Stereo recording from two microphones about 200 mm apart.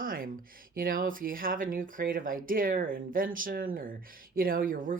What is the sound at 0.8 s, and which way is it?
Speech, 45° right (ahead or behind).